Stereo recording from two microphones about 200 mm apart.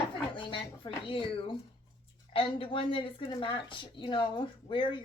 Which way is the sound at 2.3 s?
25° left (ahead or behind).